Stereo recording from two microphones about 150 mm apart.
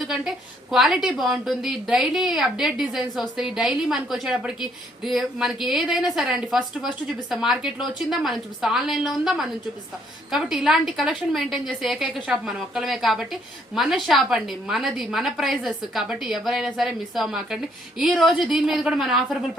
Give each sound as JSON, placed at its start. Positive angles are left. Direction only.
{"t": 0.0, "sound": "a woman's voice", "side_deg": 0}